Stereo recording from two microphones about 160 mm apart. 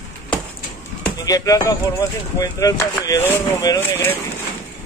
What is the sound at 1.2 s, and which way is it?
Speech, 20° left (ahead or behind).